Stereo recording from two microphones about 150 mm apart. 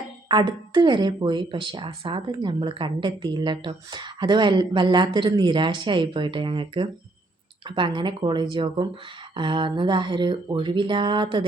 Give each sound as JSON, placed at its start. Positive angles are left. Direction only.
{"t": 0.3, "sound": "speech", "side_deg": -30}